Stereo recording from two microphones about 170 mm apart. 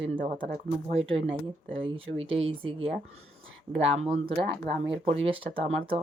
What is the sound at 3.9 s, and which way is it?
Speech, 40° right (ahead or behind).